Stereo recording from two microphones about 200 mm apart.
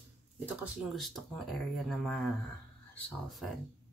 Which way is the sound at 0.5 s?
5° right (ahead or behind).